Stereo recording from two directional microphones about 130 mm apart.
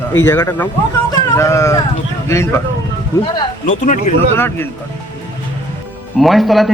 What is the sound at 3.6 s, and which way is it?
Speech, 75° left (ahead or behind).